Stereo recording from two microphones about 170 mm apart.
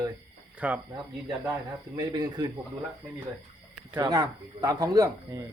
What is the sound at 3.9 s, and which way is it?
Speech, 25° right (ahead or behind).